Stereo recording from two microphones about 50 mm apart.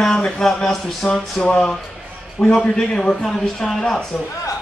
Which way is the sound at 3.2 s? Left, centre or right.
Centre.